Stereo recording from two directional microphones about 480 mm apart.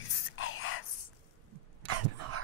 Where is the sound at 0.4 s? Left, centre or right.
Left.